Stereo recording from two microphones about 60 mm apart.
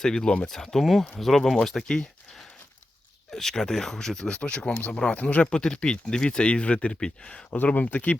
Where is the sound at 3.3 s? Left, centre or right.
Centre.